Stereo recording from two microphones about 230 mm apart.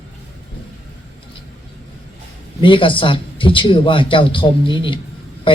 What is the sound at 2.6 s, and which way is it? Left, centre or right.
Speech, left.